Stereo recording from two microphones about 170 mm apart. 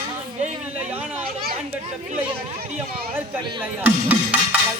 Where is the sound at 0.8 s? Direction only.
10° right (ahead or behind).